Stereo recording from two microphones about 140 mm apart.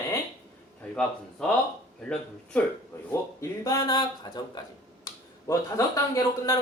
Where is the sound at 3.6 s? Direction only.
25° left (ahead or behind).